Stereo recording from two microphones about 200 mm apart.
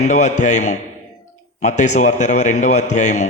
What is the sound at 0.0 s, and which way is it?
A man's voice, 35° left (ahead or behind).